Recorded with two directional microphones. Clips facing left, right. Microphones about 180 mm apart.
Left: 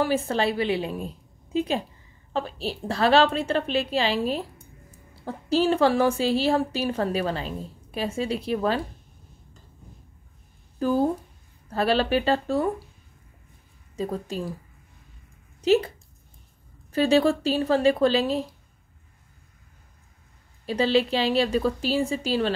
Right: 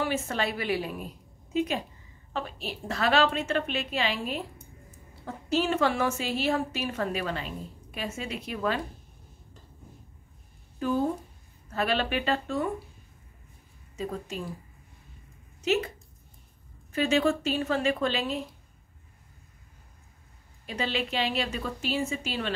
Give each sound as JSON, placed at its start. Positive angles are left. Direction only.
{"t": 0.0, "sound": "a woman's voice", "side_deg": 35}
{"t": 11.7, "sound": "a woman's voice", "side_deg": 35}
{"t": 13.9, "sound": "a woman's voice", "side_deg": 35}
{"t": 15.6, "sound": "speech", "side_deg": 35}
{"t": 16.9, "sound": "a woman's voice", "side_deg": 35}
{"t": 20.6, "sound": "a woman's voice", "side_deg": 35}